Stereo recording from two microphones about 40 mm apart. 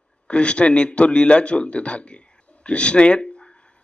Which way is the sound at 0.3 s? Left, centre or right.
Left.